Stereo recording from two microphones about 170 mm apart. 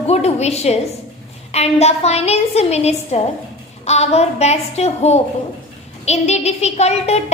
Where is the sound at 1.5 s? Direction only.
40° left (ahead or behind).